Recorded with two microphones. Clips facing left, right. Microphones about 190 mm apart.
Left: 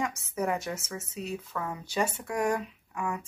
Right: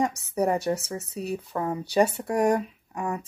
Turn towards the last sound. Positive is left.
turn(degrees=-35)  # may be behind; listen again after turning